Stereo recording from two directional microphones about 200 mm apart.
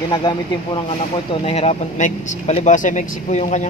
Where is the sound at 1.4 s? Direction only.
30° left (ahead or behind).